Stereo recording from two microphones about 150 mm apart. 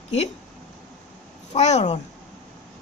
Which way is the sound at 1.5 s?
50° left (ahead or behind).